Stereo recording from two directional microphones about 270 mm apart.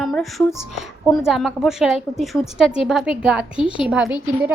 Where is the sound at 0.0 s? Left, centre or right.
Centre.